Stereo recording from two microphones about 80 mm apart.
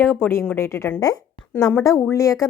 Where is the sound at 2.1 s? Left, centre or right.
Left.